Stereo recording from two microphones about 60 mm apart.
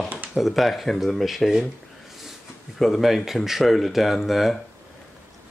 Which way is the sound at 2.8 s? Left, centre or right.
Centre.